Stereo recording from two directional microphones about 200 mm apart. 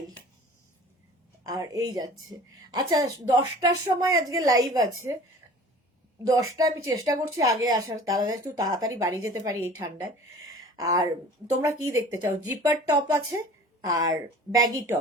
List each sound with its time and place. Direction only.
1.5 s a woman's voice: 15° right (ahead or behind)
6.6 s speech: 15° right (ahead or behind)
10.6 s a sound: 20° right (ahead or behind)
11.6 s speech: 15° right (ahead or behind)